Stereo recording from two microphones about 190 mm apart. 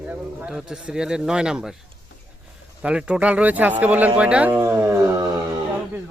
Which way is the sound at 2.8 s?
5° right (ahead or behind).